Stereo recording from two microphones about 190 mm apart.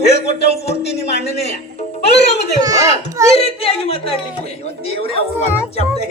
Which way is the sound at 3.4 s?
30° left (ahead or behind).